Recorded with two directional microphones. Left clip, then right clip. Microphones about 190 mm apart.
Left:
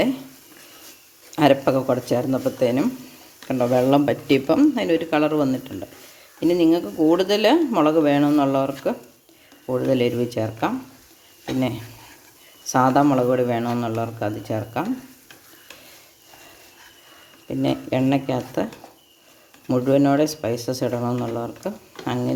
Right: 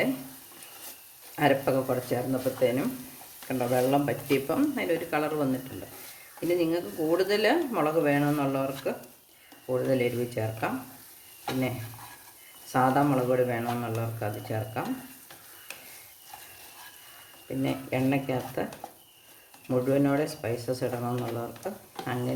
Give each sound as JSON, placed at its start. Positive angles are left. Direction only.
{"t": 1.4, "sound": "speech", "side_deg": 50}
{"t": 6.6, "sound": "speech", "side_deg": 45}
{"t": 12.7, "sound": "speech", "side_deg": 45}
{"t": 17.6, "sound": "speech", "side_deg": 50}
{"t": 19.6, "sound": "speech", "side_deg": 45}